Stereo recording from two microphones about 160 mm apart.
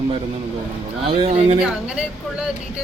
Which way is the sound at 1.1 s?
40° right (ahead or behind).